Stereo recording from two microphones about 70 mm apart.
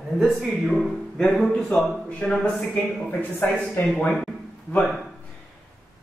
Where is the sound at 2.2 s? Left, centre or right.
Centre.